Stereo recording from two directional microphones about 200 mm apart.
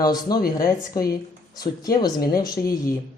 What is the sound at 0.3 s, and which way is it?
Speech, 45° left (ahead or behind).